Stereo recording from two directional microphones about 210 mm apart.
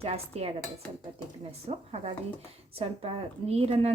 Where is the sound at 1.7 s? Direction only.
30° right (ahead or behind).